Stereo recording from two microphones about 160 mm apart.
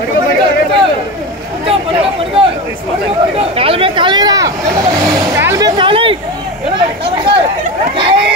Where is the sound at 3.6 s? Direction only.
35° right (ahead or behind); by 5.7 s 20° right (ahead or behind).